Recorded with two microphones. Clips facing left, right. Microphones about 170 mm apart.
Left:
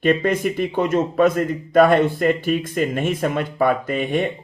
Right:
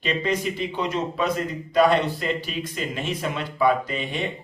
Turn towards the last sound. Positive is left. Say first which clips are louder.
# left 6 dB
turn(degrees=50)  # may be behind; listen again after turning